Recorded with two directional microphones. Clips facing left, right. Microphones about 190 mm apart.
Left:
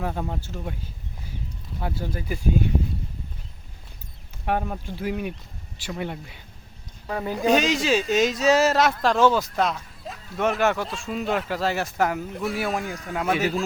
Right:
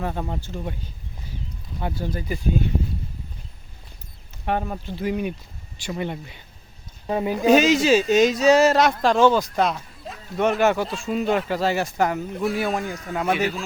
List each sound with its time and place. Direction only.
0.0 s speech: centre (ahead or behind)
1.8 s speech: 5° left (ahead or behind)
4.4 s speech: 5° left (ahead or behind)
7.1 s speech: 20° right (ahead or behind)
7.3 s speech: 5° right (ahead or behind)